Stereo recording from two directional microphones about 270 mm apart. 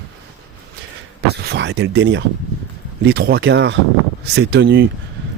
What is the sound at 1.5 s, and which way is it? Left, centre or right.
Speech, right.